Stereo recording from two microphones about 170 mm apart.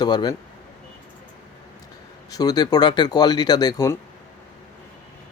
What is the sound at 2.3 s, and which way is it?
A man's voice, 20° left (ahead or behind).